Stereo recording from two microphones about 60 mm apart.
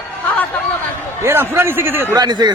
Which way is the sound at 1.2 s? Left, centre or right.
Right.